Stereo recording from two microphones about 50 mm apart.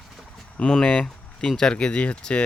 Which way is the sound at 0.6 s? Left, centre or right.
Centre.